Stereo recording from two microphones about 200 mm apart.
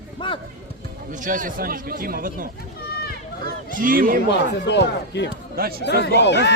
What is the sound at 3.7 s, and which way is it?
Speech, 45° right (ahead or behind).